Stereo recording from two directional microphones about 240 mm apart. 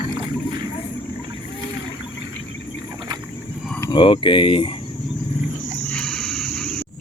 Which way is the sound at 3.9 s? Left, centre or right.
Centre.